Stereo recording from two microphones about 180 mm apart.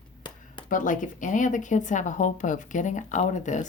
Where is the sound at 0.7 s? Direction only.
45° left (ahead or behind).